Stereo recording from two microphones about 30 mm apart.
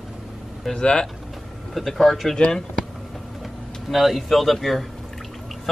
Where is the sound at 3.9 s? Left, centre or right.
Centre.